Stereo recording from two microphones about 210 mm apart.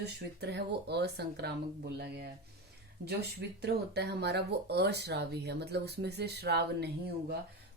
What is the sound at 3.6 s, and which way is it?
Speech, 50° right (ahead or behind).